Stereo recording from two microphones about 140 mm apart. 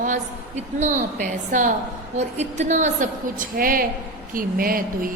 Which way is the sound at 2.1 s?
55° right (ahead or behind).